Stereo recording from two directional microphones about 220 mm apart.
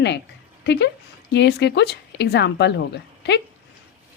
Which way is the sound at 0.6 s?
50° left (ahead or behind).